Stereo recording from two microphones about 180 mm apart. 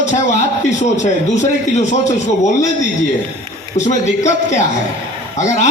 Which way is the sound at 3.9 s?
40° left (ahead or behind).